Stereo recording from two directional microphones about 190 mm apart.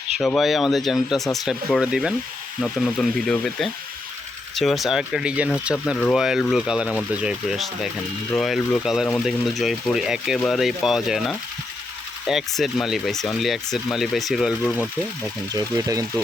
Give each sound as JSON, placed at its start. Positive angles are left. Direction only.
{"t": 0.2, "sound": "speech", "side_deg": 0}
{"t": 15.5, "sound": "speech", "side_deg": -20}